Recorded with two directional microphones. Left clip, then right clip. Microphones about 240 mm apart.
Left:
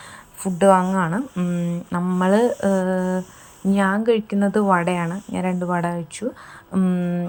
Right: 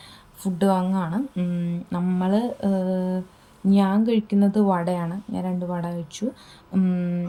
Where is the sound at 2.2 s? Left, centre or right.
Left.